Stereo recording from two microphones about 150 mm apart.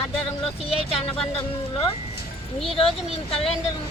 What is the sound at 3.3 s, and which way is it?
Speech, 40° left (ahead or behind).